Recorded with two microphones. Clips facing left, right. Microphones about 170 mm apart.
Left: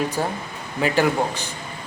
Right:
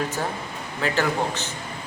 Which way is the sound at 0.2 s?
15° left (ahead or behind).